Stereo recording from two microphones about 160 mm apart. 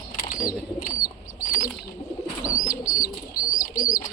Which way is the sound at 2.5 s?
20° left (ahead or behind).